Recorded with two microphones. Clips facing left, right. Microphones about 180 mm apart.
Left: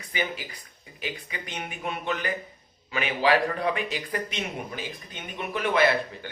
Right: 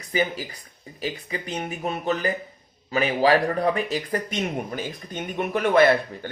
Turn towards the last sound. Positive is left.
turn(degrees=-50)  # may be behind; listen again after turning